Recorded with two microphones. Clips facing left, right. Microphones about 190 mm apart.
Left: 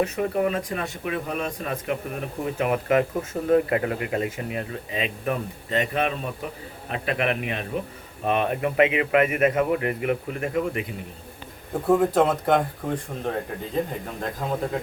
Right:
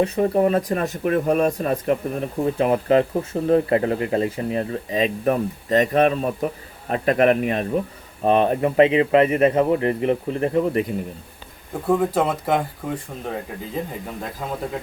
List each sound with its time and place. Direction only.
0.0 s speech: 35° right (ahead or behind)
11.9 s speech: centre (ahead or behind)
14.2 s speech: centre (ahead or behind)